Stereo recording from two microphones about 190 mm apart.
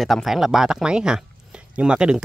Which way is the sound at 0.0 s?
Centre (ahead or behind).